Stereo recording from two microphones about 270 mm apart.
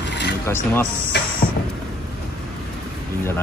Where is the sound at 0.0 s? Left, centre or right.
Left.